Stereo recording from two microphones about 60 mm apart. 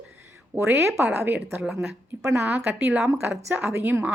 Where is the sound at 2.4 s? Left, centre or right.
Right.